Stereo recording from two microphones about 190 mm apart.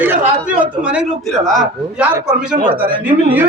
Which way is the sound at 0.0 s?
10° right (ahead or behind).